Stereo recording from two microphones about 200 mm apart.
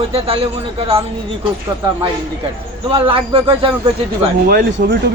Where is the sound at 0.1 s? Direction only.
30° right (ahead or behind).